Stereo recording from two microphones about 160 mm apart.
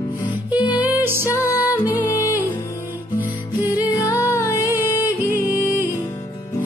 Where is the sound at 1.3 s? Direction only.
20° left (ahead or behind).